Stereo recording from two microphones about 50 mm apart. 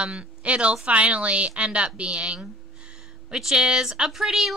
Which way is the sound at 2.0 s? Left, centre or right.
Right.